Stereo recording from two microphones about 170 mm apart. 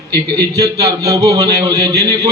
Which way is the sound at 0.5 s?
20° right (ahead or behind).